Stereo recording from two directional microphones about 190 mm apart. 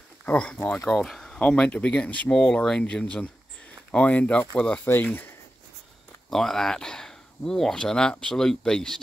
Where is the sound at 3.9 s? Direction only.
5° left (ahead or behind).